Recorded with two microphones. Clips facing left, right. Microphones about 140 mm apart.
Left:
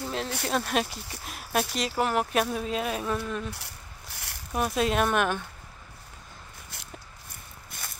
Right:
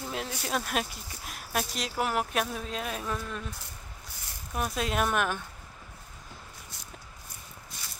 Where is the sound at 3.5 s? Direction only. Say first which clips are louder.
Left 1 dB; 75° left (ahead or behind).